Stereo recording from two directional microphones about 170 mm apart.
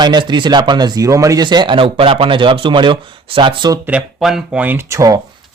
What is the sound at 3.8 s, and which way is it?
Speech, 5° right (ahead or behind).